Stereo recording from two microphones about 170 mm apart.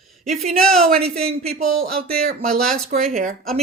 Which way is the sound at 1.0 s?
35° right (ahead or behind).